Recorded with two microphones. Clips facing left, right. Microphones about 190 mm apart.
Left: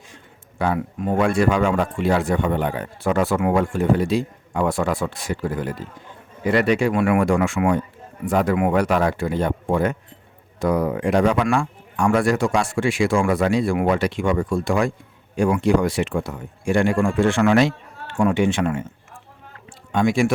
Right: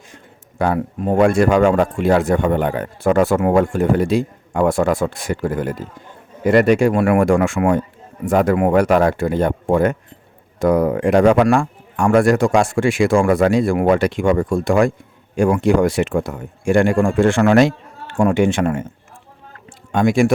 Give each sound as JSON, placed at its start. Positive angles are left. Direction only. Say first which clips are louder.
{"t": 0.6, "sound": "a man's voice", "louder": "right 4 dB", "side_deg": -45}
{"t": 19.9, "sound": "a man's voice", "louder": "right 4 dB", "side_deg": -50}